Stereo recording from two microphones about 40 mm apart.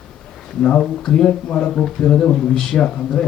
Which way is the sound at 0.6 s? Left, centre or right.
Left.